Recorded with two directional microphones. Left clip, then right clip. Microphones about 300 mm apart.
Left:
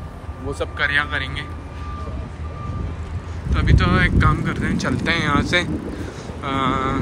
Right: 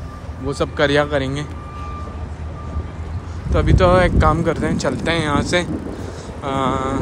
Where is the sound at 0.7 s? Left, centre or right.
Centre.